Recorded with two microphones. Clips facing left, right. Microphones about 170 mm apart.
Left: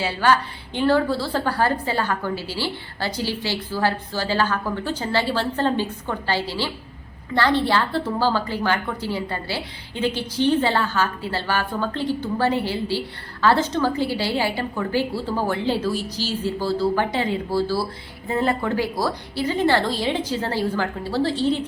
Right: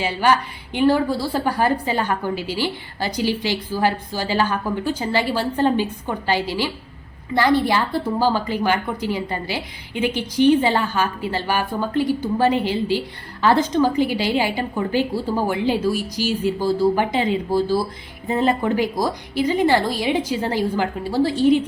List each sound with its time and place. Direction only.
0.0 s a woman's voice: 15° right (ahead or behind)